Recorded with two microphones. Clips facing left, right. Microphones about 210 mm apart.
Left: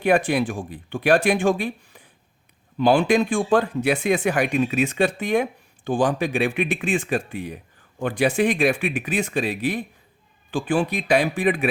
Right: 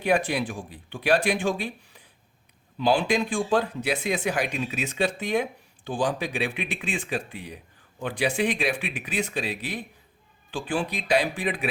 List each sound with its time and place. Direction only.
0.0 s speech: 50° left (ahead or behind)